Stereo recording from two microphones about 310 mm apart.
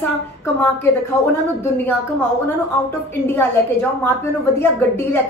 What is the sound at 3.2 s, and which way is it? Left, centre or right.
Speech, centre.